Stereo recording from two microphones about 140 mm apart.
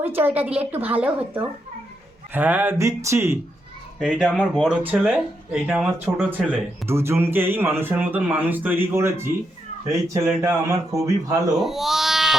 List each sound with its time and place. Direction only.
0.0 s speech: 15° right (ahead or behind)
4.0 s speech: 5° right (ahead or behind); by 11.3 s 25° right (ahead or behind)
11.5 s speech: centre (ahead or behind)